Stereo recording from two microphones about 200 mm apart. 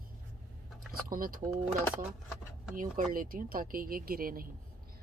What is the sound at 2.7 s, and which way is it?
Speech, 40° right (ahead or behind).